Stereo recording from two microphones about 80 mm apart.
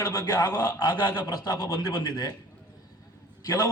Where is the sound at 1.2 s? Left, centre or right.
Left.